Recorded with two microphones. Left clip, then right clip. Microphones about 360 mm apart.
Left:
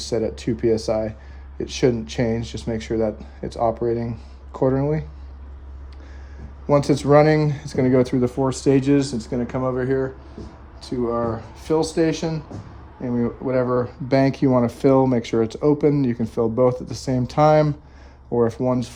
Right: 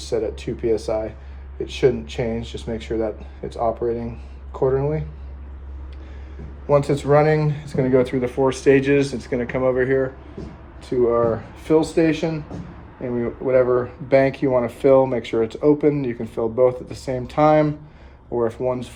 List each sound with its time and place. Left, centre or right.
0.1 s speech: left
6.7 s speech: left
11.7 s speech: centre